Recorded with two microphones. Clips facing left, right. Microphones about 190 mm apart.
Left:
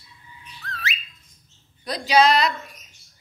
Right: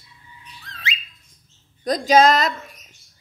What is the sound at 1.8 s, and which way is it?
Speech, 45° right (ahead or behind).